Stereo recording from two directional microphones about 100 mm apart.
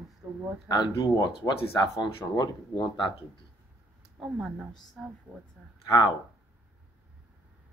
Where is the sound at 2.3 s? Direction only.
40° left (ahead or behind).